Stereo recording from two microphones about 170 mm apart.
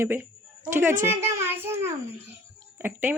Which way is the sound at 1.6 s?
15° right (ahead or behind).